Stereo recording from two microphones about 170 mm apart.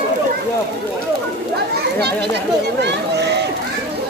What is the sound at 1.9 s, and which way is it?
A child's voice, 75° right (ahead or behind).